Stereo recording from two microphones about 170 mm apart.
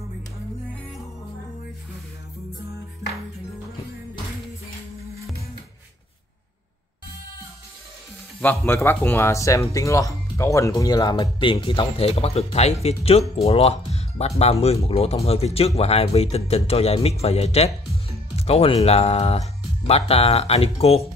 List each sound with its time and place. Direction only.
8.4 s speech: 10° left (ahead or behind); by 21.1 s 35° left (ahead or behind)